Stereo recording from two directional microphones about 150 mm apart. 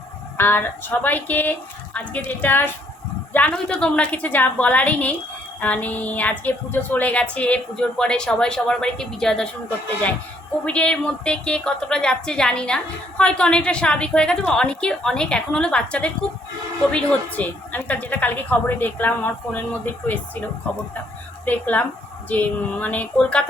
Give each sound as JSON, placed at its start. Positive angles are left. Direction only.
{"t": 0.3, "sound": "a woman's voice", "side_deg": 15}
{"t": 10.7, "sound": "a woman's voice", "side_deg": 5}
{"t": 21.4, "sound": "a woman's voice", "side_deg": 10}